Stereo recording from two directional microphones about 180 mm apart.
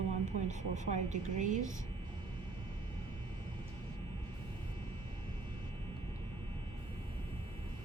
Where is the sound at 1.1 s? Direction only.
45° right (ahead or behind).